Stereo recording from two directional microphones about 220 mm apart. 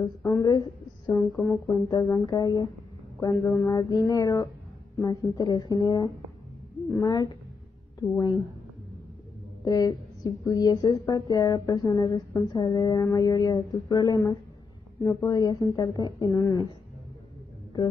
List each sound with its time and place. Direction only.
0.0 s speech: 15° left (ahead or behind)
9.7 s speech: 15° left (ahead or behind)